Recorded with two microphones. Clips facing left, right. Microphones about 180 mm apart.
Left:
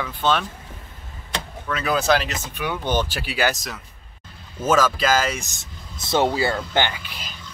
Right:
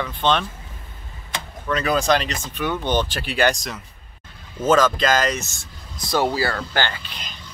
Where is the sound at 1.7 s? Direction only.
5° left (ahead or behind).